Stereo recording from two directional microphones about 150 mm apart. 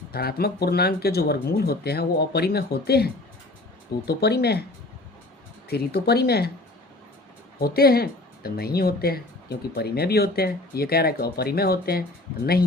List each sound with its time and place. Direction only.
0.1 s speech: 90° left
5.6 s speech: 90° left
7.6 s speech: 90° left